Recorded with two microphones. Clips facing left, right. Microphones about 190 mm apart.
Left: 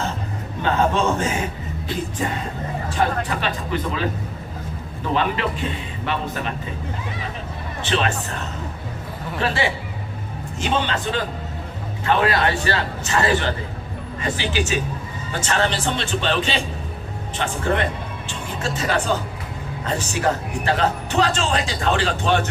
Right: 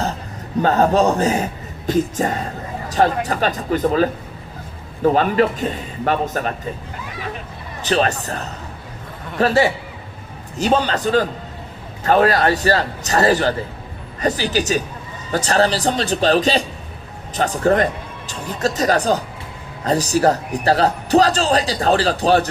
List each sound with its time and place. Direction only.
0.6 s a man's voice: 40° right (ahead or behind)
7.8 s a man's voice: 40° right (ahead or behind)